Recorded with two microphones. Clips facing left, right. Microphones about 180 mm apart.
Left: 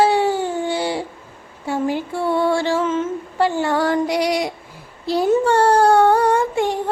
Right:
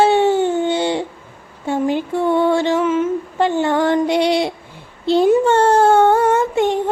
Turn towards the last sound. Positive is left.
turn(degrees=-20)  # may be behind; listen again after turning